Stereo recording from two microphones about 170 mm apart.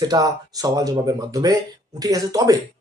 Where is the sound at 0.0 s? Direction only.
20° right (ahead or behind).